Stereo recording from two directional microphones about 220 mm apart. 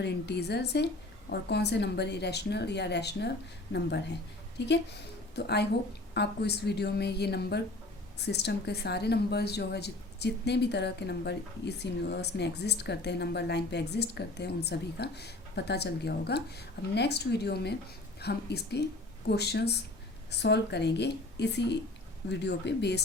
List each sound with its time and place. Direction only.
0.0 s a woman's voice: 50° left (ahead or behind)